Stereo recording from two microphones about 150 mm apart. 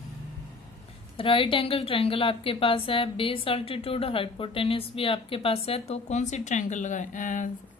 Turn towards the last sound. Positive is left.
turn(degrees=60)  # may be behind; listen again after turning